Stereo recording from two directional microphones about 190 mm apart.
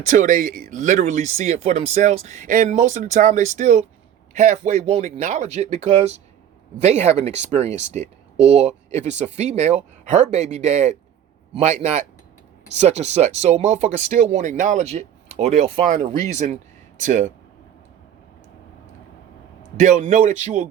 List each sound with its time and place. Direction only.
0.1 s speech: 40° right (ahead or behind)
19.7 s speech: 40° right (ahead or behind)